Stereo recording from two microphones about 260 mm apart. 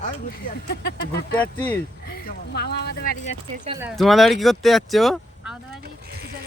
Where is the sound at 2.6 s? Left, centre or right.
Left.